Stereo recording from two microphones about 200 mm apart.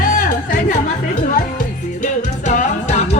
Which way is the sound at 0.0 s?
40° left (ahead or behind).